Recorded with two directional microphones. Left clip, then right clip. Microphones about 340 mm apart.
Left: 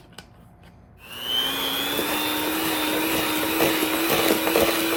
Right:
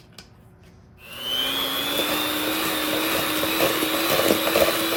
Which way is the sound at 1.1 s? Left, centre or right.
Centre.